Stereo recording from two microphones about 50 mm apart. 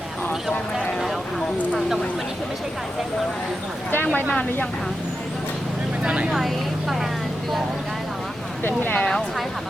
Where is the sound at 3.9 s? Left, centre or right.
Left.